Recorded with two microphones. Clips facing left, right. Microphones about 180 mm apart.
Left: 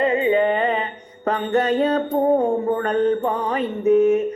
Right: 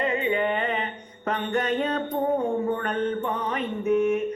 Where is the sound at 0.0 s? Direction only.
40° left (ahead or behind).